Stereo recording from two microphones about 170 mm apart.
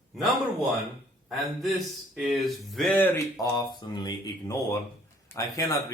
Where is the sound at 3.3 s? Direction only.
20° left (ahead or behind).